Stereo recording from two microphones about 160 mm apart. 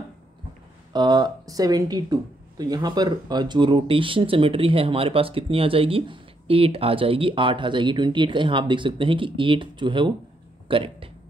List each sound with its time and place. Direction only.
0.9 s speech: 25° right (ahead or behind)